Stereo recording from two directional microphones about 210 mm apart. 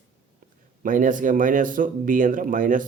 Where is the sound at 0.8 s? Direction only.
40° right (ahead or behind).